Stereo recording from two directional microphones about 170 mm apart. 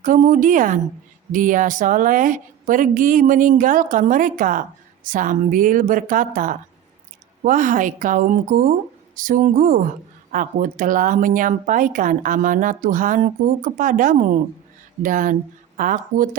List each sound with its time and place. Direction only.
0.0 s a woman's voice: 50° right (ahead or behind)